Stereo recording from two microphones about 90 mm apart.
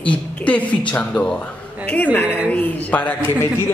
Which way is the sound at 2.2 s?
15° right (ahead or behind).